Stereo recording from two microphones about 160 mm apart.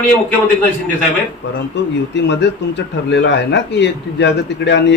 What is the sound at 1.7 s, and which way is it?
Speech, 90° left.